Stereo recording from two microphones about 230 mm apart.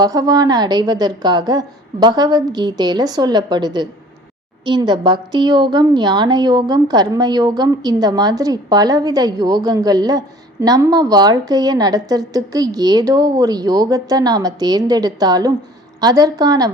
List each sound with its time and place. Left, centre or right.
0.0 s a woman's voice: centre